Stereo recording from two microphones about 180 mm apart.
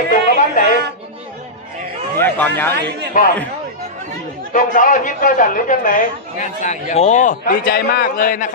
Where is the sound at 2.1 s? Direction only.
10° left (ahead or behind).